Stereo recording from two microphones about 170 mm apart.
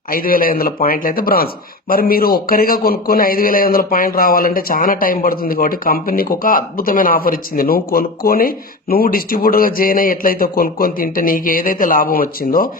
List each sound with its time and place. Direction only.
0.1 s a man's voice: 55° left (ahead or behind)